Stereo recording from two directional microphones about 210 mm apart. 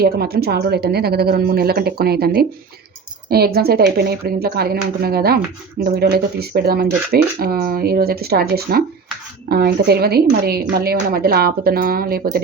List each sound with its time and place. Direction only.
0.0 s speech: 50° right (ahead or behind)